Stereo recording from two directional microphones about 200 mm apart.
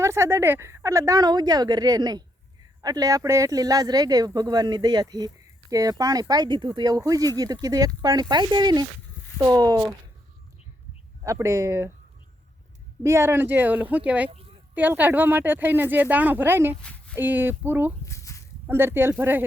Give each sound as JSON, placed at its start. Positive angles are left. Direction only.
{"t": 0.0, "sound": "a woman's voice", "side_deg": -15}
{"t": 11.2, "sound": "a woman's voice", "side_deg": -15}
{"t": 13.0, "sound": "a woman's voice", "side_deg": -15}
{"t": 14.3, "sound": "a sound", "side_deg": -30}
{"t": 14.8, "sound": "a woman's voice", "side_deg": -10}
{"t": 18.0, "sound": "a sound", "side_deg": 15}
{"t": 18.7, "sound": "a woman's voice", "side_deg": -10}